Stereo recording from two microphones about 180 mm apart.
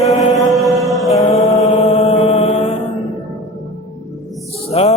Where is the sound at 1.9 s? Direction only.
35° left (ahead or behind).